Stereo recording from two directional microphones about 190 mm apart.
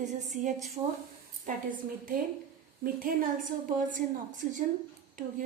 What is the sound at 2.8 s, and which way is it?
A woman's voice, 45° right (ahead or behind).